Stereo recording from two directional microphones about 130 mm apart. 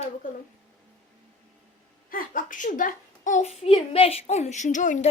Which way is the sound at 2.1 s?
90° left.